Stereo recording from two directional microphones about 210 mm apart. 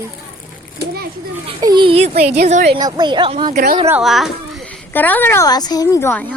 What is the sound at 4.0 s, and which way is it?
A child's voice, centre (ahead or behind).